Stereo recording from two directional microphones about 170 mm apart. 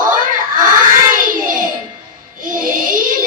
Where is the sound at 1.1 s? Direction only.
55° right (ahead or behind).